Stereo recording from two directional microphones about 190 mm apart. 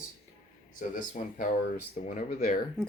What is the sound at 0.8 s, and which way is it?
Speech, 45° left (ahead or behind).